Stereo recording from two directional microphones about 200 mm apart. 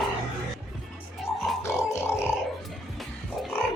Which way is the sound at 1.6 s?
10° left (ahead or behind).